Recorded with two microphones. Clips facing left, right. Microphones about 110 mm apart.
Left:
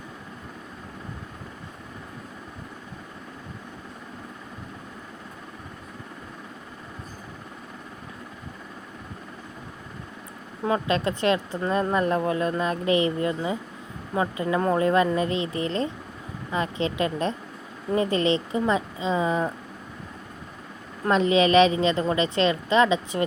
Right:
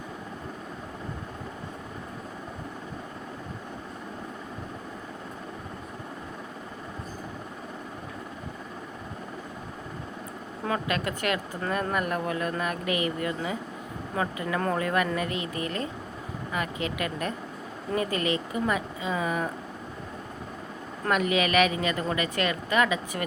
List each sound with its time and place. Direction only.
10.7 s speech: 25° left (ahead or behind)
21.1 s speech: 25° left (ahead or behind)